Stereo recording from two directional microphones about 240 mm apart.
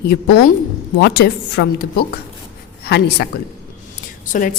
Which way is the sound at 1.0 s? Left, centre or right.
Left.